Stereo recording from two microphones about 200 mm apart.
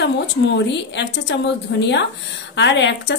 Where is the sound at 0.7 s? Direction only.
60° left (ahead or behind).